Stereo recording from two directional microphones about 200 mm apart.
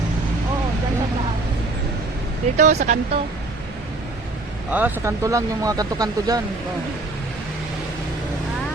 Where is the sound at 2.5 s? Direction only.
35° right (ahead or behind).